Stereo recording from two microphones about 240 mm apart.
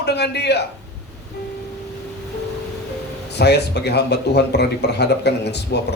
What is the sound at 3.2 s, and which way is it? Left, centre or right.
A man's voice, left.